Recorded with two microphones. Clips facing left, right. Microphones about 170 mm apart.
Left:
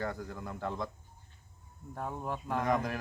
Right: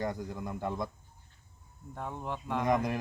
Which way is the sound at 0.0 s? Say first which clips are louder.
Right 3 dB; 15° right (ahead or behind).